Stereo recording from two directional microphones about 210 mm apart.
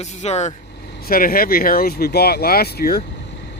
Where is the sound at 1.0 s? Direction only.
45° left (ahead or behind).